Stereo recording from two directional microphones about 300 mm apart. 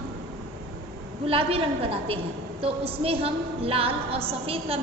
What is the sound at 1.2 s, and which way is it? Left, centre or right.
A woman's voice, centre.